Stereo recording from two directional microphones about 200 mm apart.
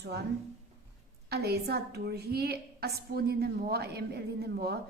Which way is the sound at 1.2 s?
55° right (ahead or behind).